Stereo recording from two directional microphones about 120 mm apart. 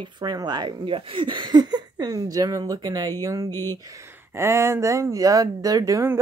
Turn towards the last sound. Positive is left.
turn(degrees=-25)  # may be behind; listen again after turning